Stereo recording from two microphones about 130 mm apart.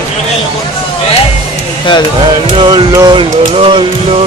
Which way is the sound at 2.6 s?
35° right (ahead or behind).